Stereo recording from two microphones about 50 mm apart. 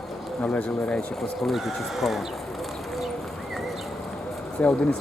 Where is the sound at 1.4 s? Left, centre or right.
Centre.